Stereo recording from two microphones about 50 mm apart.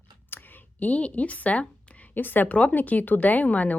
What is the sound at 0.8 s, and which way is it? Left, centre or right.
Speech, left.